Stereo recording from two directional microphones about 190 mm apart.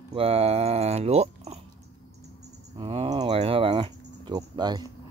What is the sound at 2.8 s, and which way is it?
Speech, 30° right (ahead or behind).